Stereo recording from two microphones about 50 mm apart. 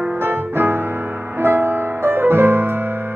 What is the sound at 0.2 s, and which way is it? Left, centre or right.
Music, right.